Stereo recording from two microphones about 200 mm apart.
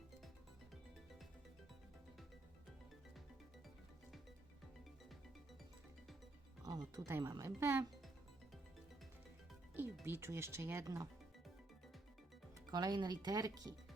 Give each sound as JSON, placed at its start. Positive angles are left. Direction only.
{"t": 6.7, "sound": "speech", "side_deg": -20}
{"t": 9.7, "sound": "speech", "side_deg": -10}
{"t": 12.7, "sound": "speech", "side_deg": -20}